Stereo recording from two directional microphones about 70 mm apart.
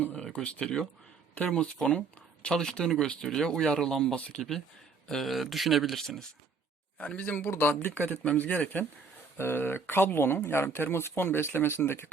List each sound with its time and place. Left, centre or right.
0.2 s speech: centre
7.0 s speech: centre
9.4 s speech: left